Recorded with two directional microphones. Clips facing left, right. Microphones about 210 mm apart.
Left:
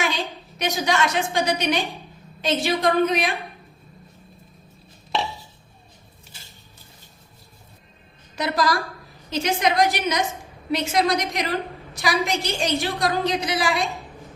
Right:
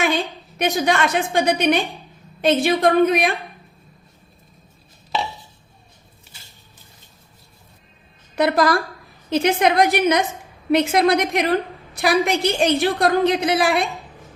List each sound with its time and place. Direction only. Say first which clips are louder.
0.6 s a woman's voice: right 3 dB; 55° right (ahead or behind)
8.4 s a woman's voice: right 6 dB; 60° right (ahead or behind)